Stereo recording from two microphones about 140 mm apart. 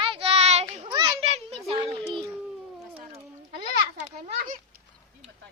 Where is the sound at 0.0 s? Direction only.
40° right (ahead or behind).